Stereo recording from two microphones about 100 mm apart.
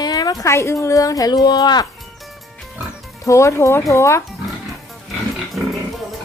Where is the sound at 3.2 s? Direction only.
30° left (ahead or behind).